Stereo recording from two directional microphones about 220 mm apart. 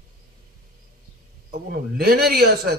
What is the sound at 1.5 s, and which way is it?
A man's voice, 45° right (ahead or behind).